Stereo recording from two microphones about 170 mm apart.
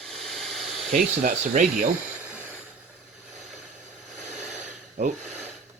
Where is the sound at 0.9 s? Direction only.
55° right (ahead or behind).